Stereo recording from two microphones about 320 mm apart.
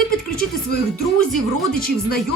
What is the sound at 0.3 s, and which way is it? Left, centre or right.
Music, left.